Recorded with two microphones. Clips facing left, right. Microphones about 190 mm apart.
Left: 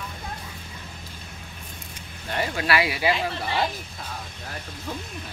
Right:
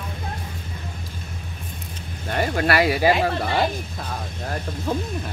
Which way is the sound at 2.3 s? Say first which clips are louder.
Right 4 dB; 50° right (ahead or behind).